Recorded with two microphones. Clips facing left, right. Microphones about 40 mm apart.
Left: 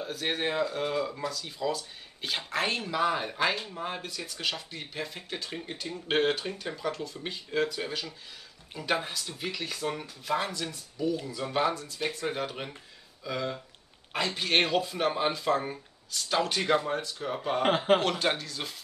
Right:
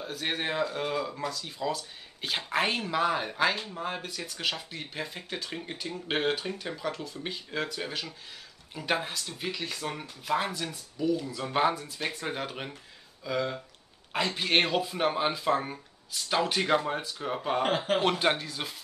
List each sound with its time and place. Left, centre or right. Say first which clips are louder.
0.0 s speech: left 1 dB; centre
11.2 s speech: even; centre
11.5 s speech: right 2 dB; centre
17.6 s speech: left 7 dB; left
18.0 s speech: right 2 dB; centre